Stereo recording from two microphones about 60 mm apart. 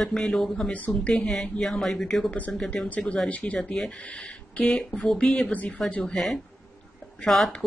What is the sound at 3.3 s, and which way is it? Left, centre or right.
Speech, left.